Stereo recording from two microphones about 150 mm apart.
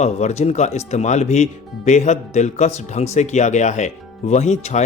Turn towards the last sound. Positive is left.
turn(degrees=50)  # may be behind; listen again after turning